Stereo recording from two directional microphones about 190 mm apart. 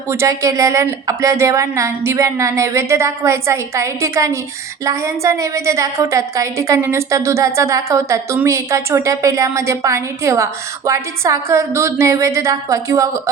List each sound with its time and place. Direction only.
0.1 s a woman's voice: 15° right (ahead or behind)